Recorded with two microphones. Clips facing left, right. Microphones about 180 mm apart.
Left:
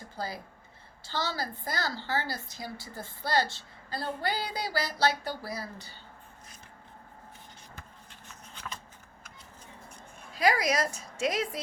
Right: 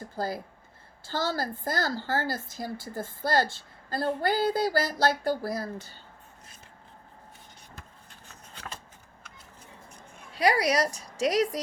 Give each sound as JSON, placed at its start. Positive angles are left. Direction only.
{"t": 0.2, "sound": "a woman's voice", "side_deg": -50}
{"t": 10.3, "sound": "a woman's voice", "side_deg": -35}